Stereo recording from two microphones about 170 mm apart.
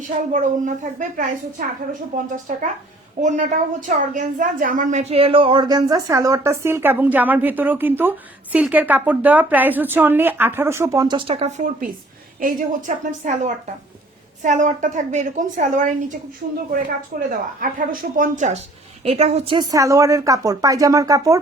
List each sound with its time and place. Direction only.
0.1 s a woman's voice: 45° right (ahead or behind); by 11.2 s 20° right (ahead or behind)
11.3 s a woman's voice: 40° right (ahead or behind)
19.7 s a woman's voice: 20° right (ahead or behind)